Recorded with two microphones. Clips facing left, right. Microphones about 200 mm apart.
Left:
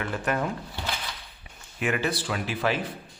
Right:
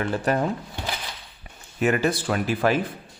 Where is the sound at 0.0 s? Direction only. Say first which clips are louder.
Right 5 dB; 35° right (ahead or behind).